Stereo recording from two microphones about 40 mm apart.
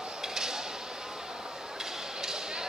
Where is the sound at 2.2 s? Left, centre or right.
Centre.